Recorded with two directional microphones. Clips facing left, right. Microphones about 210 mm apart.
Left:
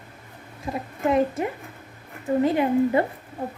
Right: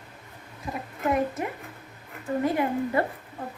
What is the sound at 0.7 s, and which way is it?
A child's voice, 30° left (ahead or behind).